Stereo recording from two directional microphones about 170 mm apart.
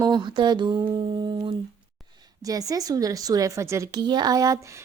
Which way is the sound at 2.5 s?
20° right (ahead or behind).